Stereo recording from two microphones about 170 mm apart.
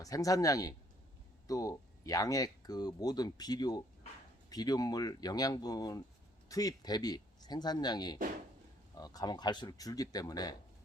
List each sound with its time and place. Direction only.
0.0 s speech: 20° left (ahead or behind)